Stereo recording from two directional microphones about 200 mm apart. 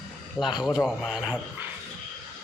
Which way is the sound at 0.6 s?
5° right (ahead or behind).